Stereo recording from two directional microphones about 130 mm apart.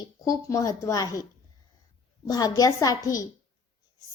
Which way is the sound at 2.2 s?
30° left (ahead or behind).